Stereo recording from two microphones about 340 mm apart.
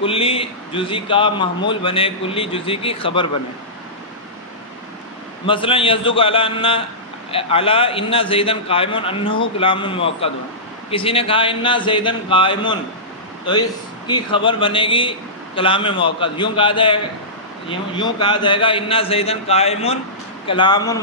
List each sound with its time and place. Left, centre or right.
0.0 s a man's voice: centre
5.5 s a man's voice: centre